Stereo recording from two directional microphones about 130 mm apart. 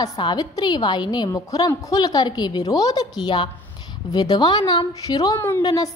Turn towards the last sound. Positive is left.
turn(degrees=30)  # may be behind; listen again after turning